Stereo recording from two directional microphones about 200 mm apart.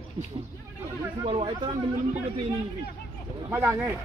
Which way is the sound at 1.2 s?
25° right (ahead or behind).